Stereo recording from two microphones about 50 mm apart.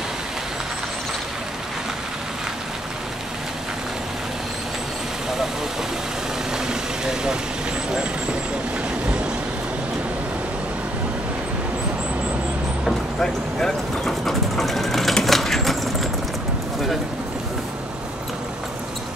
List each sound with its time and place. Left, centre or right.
6.7 s vehicle: centre
13.2 s speech: centre
15.2 s a sound: centre